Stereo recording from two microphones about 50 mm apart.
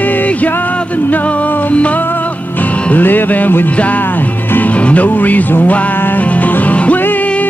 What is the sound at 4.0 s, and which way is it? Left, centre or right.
Music, left.